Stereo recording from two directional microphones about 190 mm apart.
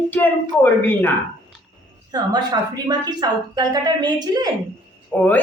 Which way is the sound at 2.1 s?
20° right (ahead or behind).